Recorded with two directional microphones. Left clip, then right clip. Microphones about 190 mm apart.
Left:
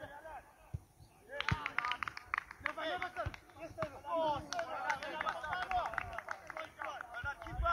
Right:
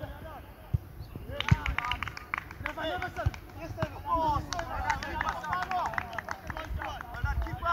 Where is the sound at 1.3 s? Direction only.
50° right (ahead or behind).